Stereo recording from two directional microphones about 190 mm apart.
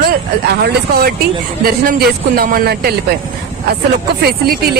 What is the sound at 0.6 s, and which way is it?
Speech, 55° right (ahead or behind).